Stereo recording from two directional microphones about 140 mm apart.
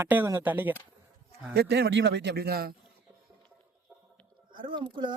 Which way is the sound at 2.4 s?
90° right.